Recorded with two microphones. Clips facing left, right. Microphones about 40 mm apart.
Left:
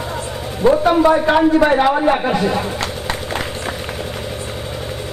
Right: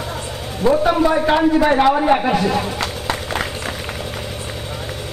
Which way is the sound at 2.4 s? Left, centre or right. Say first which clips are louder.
Even; centre.